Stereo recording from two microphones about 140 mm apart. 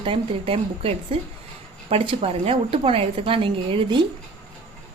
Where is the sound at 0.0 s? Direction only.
40° right (ahead or behind).